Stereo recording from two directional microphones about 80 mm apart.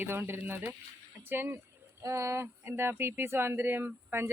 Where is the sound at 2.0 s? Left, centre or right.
Right.